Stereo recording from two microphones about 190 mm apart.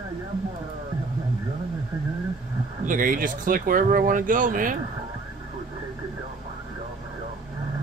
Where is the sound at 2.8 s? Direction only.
45° right (ahead or behind).